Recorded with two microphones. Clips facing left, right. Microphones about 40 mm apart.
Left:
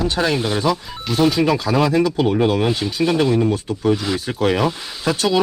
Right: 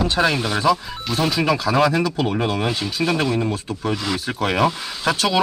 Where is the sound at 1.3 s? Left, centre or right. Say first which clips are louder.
Left 2 dB; right.